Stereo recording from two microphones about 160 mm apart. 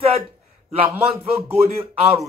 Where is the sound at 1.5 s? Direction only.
40° right (ahead or behind).